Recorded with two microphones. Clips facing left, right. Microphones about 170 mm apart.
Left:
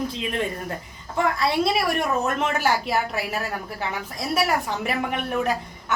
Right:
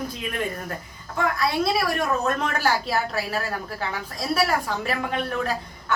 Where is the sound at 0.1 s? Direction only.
20° left (ahead or behind).